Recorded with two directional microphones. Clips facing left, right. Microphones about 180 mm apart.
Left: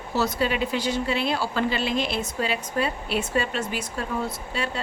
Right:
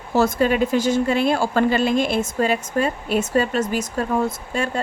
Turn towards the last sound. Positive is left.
turn(degrees=-45)  # may be behind; listen again after turning